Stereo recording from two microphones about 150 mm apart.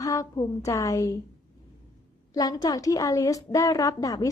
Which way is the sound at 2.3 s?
25° left (ahead or behind).